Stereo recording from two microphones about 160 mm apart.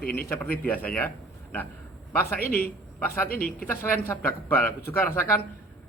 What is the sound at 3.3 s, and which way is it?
Speech, 70° left (ahead or behind).